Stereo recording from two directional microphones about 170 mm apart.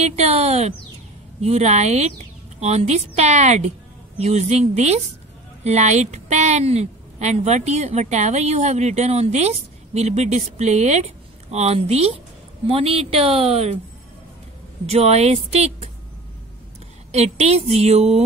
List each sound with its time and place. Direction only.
0.0 s a woman's voice: 35° right (ahead or behind)
14.9 s a woman's voice: 40° right (ahead or behind)
17.1 s a woman's voice: 40° right (ahead or behind)